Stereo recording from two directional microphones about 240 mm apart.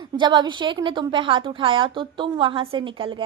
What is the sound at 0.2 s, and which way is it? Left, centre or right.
A woman's voice, centre.